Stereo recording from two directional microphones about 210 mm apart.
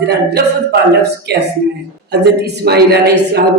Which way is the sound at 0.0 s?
50° right (ahead or behind).